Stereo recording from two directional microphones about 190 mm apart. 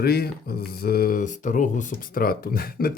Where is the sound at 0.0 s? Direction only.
55° left (ahead or behind).